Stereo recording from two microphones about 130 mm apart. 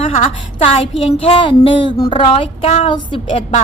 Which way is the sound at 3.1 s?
40° left (ahead or behind).